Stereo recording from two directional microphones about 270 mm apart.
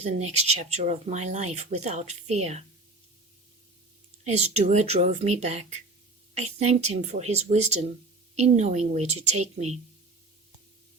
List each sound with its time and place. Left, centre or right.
0.3 s speech: right
4.3 s speech: right